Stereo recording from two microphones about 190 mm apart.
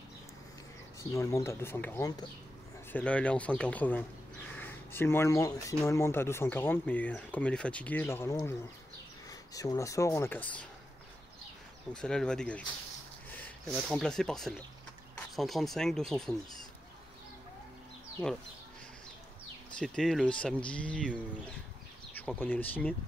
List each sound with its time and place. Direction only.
1.1 s speech: 15° left (ahead or behind)
2.9 s speech: 5° left (ahead or behind)
11.9 s speech: 5° left (ahead or behind)
19.8 s speech: centre (ahead or behind)